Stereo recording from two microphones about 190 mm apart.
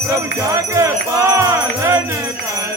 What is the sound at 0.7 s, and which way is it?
Jingle bell, 15° right (ahead or behind).